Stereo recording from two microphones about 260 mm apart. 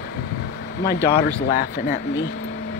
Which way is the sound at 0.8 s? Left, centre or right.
Left.